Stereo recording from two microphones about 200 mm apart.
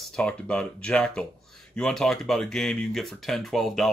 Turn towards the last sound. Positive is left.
turn(degrees=0)  # may be behind; listen again after turning